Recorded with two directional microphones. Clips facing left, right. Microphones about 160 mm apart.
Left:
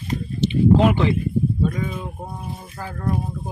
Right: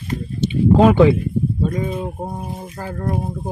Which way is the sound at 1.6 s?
30° right (ahead or behind).